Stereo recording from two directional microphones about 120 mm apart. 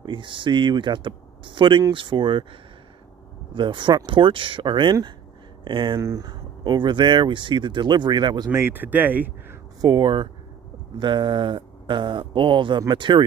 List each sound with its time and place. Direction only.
0.0 s speech: 40° right (ahead or behind)
3.5 s speech: 40° right (ahead or behind)
5.9 s speech: 30° right (ahead or behind)
8.5 s speech: 15° right (ahead or behind)
9.8 s speech: 35° right (ahead or behind)